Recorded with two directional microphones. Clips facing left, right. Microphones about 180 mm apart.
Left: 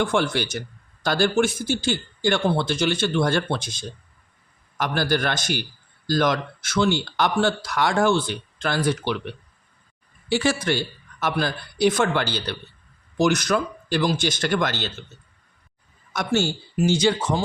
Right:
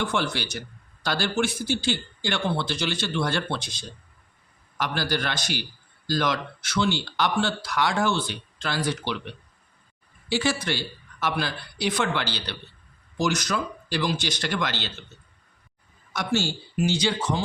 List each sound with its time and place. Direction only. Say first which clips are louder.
0.0 s speech: left 5 dB; 50° left (ahead or behind)
10.2 s speech: left 4 dB; 50° left (ahead or behind)
16.1 s speech: left 3 dB; 50° left (ahead or behind)